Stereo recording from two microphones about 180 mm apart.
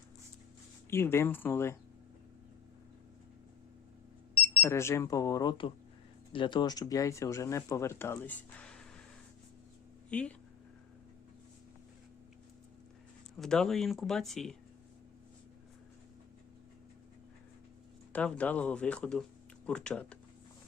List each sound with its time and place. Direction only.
0.9 s speech: 15° left (ahead or behind)
4.6 s speech: 15° left (ahead or behind)
10.1 s speech: 5° left (ahead or behind)
13.3 s speech: centre (ahead or behind)
18.1 s speech: 5° left (ahead or behind)